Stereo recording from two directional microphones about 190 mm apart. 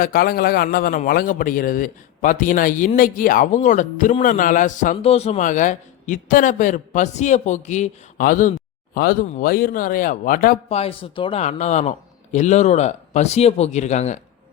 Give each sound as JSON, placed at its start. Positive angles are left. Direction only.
{"t": 0.0, "sound": "a man's voice", "side_deg": 50}
{"t": 10.7, "sound": "a man's voice", "side_deg": 30}